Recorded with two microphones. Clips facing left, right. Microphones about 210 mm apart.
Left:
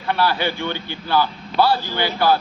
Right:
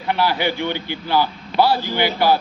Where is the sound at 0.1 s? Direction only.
15° right (ahead or behind).